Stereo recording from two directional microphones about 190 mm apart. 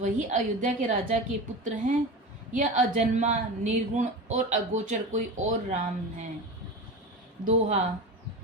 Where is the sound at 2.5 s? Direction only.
40° right (ahead or behind).